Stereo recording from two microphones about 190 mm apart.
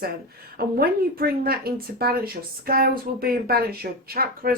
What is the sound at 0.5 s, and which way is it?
Speech, 50° right (ahead or behind).